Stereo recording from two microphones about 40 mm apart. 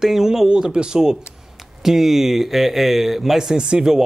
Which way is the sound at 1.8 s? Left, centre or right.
Centre.